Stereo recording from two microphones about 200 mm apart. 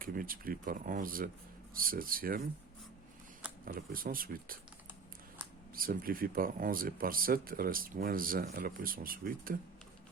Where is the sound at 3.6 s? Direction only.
45° right (ahead or behind).